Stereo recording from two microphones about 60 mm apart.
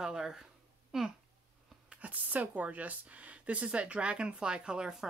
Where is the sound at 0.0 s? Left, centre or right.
Centre.